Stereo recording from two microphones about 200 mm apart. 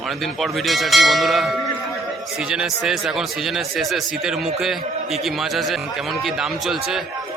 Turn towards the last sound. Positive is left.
turn(degrees=0)  # may be behind; listen again after turning